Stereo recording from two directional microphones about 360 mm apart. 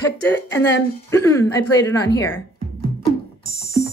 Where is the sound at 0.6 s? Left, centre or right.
Left.